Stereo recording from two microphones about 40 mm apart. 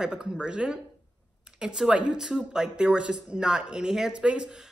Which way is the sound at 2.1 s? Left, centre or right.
Centre.